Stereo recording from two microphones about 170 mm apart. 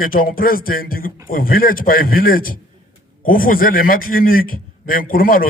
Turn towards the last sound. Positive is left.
turn(degrees=55)  # may be behind; listen again after turning